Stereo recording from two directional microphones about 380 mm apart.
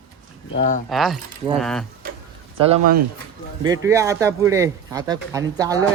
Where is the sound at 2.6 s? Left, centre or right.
Centre.